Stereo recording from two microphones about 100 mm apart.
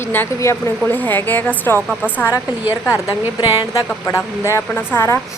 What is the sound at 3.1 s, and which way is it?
Speech, 25° right (ahead or behind).